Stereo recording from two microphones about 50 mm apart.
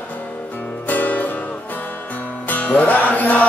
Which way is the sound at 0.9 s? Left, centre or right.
Left.